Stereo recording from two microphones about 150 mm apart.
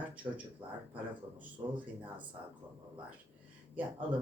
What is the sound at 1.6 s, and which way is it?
Speech, 15° right (ahead or behind).